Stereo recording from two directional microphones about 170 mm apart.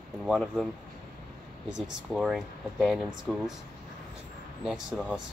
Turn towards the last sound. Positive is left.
turn(degrees=0)  # may be behind; listen again after turning